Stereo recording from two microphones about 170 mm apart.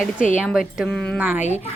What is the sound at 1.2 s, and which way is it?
Speech, 10° right (ahead or behind).